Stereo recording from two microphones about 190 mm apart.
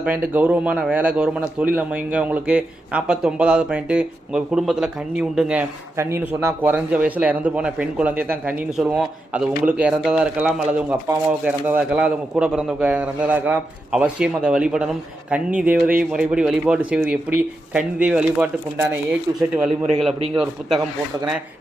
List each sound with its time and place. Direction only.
0.0 s a man's voice: 10° right (ahead or behind)
19.5 s a man's voice: centre (ahead or behind)